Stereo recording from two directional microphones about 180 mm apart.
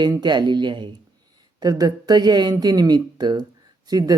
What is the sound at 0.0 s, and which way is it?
Speech, 25° right (ahead or behind).